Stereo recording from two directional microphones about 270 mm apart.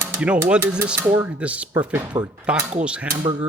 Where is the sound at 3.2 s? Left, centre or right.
Centre.